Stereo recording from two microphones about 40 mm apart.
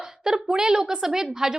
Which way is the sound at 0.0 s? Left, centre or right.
Centre.